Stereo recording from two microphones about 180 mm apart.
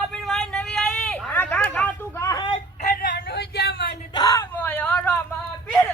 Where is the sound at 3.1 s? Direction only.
70° left (ahead or behind).